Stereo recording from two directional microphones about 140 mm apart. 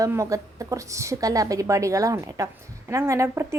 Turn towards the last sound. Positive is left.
turn(degrees=-20)  # may be behind; listen again after turning